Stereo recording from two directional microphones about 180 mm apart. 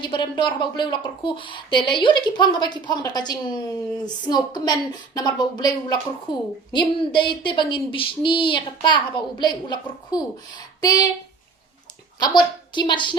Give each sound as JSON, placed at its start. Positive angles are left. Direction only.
{"t": 0.0, "sound": "a woman's voice", "side_deg": 25}
{"t": 10.8, "sound": "a sound", "side_deg": 20}
{"t": 12.2, "sound": "a woman's voice", "side_deg": 25}